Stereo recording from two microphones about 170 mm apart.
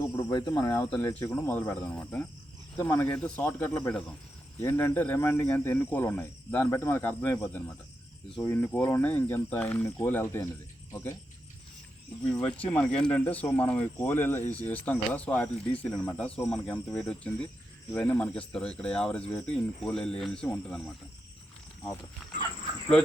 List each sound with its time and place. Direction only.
0.2 s speech: 25° left (ahead or behind)
12.3 s speech: 5° left (ahead or behind)